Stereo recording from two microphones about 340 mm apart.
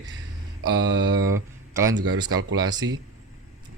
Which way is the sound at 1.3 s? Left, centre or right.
Centre.